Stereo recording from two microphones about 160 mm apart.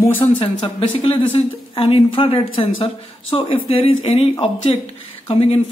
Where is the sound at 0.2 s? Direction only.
30° left (ahead or behind).